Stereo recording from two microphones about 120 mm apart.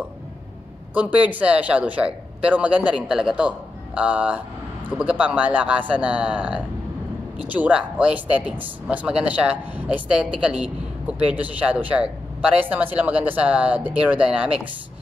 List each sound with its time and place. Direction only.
0.9 s speech: 10° right (ahead or behind)